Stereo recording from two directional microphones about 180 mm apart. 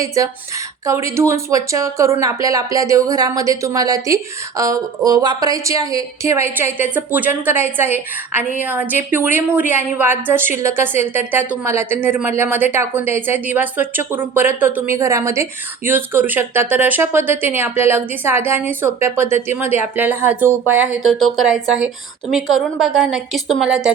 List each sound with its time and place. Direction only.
0.0 s a woman's voice: 20° right (ahead or behind)